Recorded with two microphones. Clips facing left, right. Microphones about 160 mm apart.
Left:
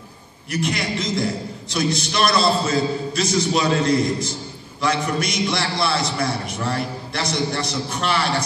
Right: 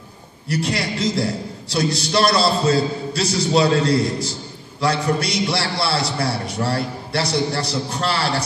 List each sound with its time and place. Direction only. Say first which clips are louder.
0.5 s a man's voice: right 1 dB; 35° right (ahead or behind)